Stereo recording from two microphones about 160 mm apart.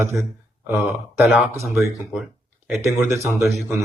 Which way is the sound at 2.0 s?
Centre (ahead or behind).